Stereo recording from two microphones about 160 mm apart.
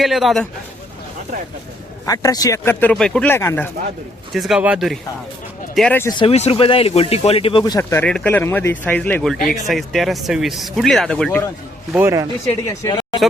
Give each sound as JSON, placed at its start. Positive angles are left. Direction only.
{"t": 0.0, "sound": "speech", "side_deg": 0}
{"t": 2.0, "sound": "speech", "side_deg": 20}
{"t": 2.9, "sound": "speech", "side_deg": 5}
{"t": 4.4, "sound": "speech", "side_deg": -5}
{"t": 6.0, "sound": "speech", "side_deg": 25}
{"t": 7.6, "sound": "speech", "side_deg": 20}
{"t": 11.9, "sound": "speech", "side_deg": -20}
{"t": 12.6, "sound": "speech", "side_deg": 25}